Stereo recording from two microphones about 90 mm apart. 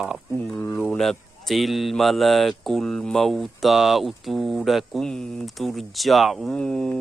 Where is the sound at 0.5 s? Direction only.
25° left (ahead or behind).